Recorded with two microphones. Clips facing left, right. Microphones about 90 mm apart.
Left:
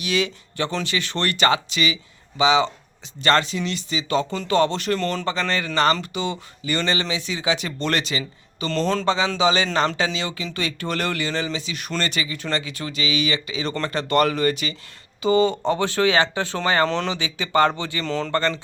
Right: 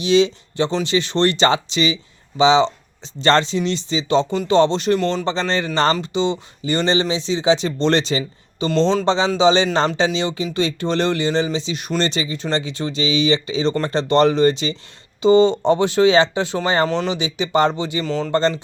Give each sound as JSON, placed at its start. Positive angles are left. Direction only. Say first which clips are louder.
{"t": 0.0, "sound": "speech", "louder": "right 8 dB", "side_deg": -25}
{"t": 18.0, "sound": "speech", "louder": "right 1 dB", "side_deg": -5}
{"t": 18.3, "sound": "speech", "louder": "right 6 dB", "side_deg": -25}